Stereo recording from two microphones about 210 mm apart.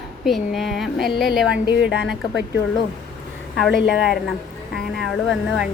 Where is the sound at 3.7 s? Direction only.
50° left (ahead or behind).